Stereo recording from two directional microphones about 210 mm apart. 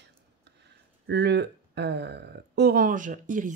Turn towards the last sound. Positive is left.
turn(degrees=-35)  # may be behind; listen again after turning